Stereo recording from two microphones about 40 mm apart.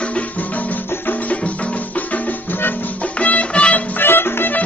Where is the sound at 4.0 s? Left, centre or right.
Left.